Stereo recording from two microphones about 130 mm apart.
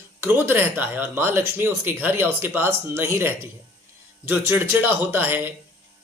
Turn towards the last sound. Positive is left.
turn(degrees=-15)  # may be behind; listen again after turning